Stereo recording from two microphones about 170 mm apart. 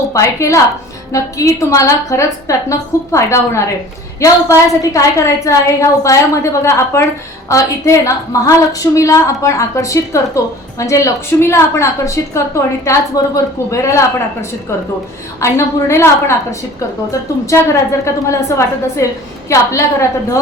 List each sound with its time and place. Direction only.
0.1 s a woman's voice: 15° left (ahead or behind)
15.4 s a woman's voice: 15° left (ahead or behind)